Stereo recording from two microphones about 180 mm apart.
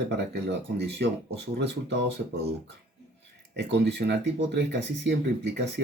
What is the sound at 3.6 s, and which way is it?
Speech, 70° right (ahead or behind).